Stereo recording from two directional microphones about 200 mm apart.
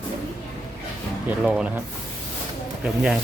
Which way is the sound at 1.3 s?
5° right (ahead or behind).